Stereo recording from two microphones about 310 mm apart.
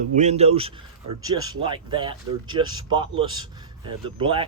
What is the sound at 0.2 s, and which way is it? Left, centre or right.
Speech, right.